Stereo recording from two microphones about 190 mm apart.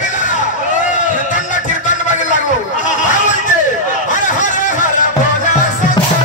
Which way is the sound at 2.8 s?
40° left (ahead or behind).